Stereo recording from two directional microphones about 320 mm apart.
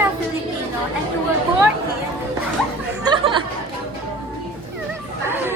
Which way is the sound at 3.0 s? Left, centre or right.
Centre.